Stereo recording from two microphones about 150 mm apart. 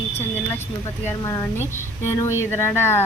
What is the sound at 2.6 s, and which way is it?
Speech, 15° left (ahead or behind).